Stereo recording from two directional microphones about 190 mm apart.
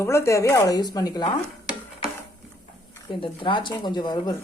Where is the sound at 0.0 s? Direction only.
15° left (ahead or behind).